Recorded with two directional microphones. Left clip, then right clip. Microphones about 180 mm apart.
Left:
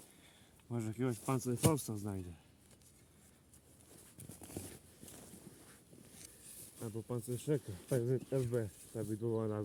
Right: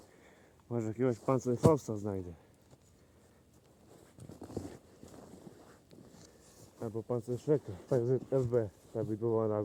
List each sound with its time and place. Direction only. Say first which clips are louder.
0.7 s speech: right 7 dB; 50° left (ahead or behind)
1.5 s speech: right 8 dB; 25° left (ahead or behind)
1.9 s speech: right 7 dB; 45° left (ahead or behind)
4.4 s a sound: right 7 dB; 25° left (ahead or behind)
6.7 s speech: right 7 dB; 35° left (ahead or behind)
7.2 s speech: right 6 dB; 20° left (ahead or behind)